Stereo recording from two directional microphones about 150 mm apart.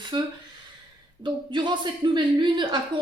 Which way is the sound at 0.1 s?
35° right (ahead or behind).